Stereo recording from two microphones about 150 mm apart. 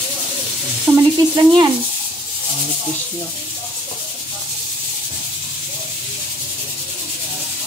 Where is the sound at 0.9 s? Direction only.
25° right (ahead or behind).